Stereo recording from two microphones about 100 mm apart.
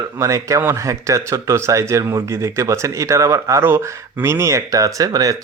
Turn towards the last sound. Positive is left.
turn(degrees=-35)  # may be behind; listen again after turning